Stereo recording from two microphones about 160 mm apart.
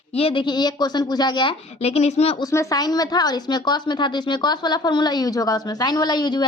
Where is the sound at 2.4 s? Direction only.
20° left (ahead or behind).